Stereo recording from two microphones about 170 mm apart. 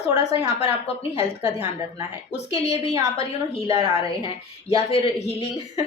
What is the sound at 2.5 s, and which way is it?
A man's voice, 40° left (ahead or behind).